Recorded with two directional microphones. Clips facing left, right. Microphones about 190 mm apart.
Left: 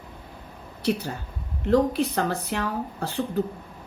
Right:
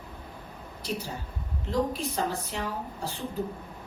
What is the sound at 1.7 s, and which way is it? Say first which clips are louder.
Speech: left 7 dB; 65° left (ahead or behind).